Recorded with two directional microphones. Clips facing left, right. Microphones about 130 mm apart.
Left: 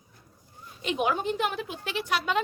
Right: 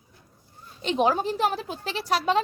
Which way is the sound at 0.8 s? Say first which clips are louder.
Right 4 dB; 30° right (ahead or behind).